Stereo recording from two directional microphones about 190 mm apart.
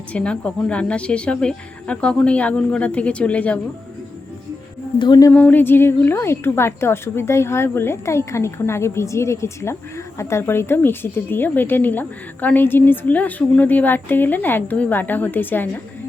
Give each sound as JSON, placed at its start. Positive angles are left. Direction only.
{"t": 0.1, "sound": "a woman's voice", "side_deg": 5}
{"t": 4.9, "sound": "speech", "side_deg": 20}
{"t": 5.3, "sound": "a woman's voice", "side_deg": 10}